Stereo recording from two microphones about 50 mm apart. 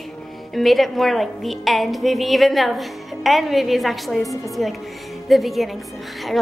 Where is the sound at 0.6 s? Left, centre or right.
Centre.